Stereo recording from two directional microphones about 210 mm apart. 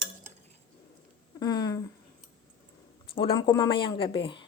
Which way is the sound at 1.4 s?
20° left (ahead or behind).